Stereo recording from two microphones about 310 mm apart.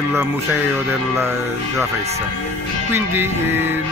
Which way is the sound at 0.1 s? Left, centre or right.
Centre.